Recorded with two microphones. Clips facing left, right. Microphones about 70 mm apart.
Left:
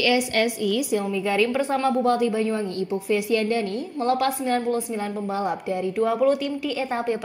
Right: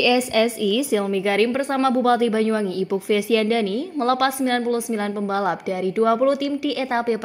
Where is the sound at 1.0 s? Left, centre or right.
Right.